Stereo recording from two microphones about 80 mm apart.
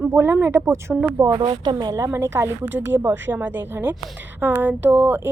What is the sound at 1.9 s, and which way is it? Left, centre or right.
A woman's voice, right.